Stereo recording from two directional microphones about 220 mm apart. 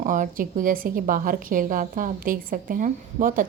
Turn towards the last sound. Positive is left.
turn(degrees=-35)  # may be behind; listen again after turning